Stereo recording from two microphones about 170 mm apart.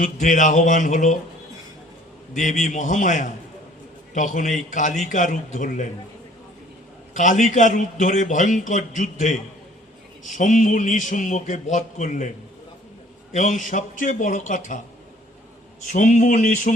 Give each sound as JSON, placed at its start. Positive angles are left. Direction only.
{"t": 0.0, "sound": "speech", "side_deg": 50}
{"t": 2.3, "sound": "speech", "side_deg": 45}
{"t": 7.1, "sound": "speech", "side_deg": 45}
{"t": 13.3, "sound": "speech", "side_deg": 45}
{"t": 15.9, "sound": "speech", "side_deg": 45}